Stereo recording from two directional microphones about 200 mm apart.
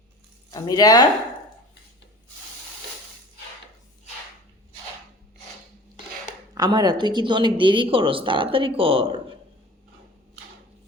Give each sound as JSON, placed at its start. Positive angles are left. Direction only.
{"t": 0.5, "sound": "speech", "side_deg": 20}
{"t": 6.5, "sound": "speech", "side_deg": -20}